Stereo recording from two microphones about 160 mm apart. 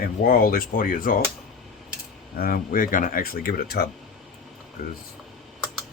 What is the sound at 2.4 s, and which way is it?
Speech, 65° left (ahead or behind).